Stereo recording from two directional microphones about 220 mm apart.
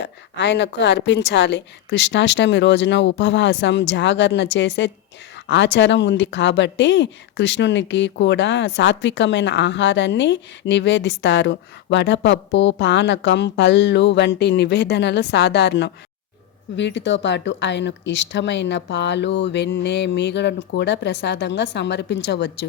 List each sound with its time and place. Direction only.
0.0 s a woman's voice: 55° left (ahead or behind)